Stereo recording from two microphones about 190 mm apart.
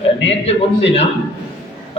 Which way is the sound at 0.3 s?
30° left (ahead or behind).